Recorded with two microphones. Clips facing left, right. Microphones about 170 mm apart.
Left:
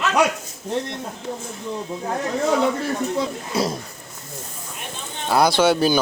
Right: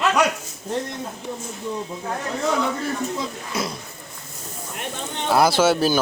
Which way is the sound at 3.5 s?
35° left (ahead or behind).